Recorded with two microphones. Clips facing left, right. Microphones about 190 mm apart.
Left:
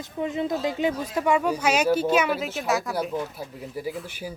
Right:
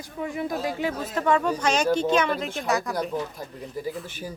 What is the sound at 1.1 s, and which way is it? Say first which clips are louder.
Speech: right 1 dB; 10° left (ahead or behind).